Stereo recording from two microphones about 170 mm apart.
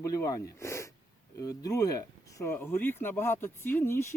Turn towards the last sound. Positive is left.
turn(degrees=15)  # may be behind; listen again after turning